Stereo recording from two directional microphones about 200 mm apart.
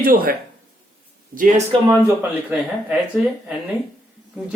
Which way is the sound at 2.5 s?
5° right (ahead or behind).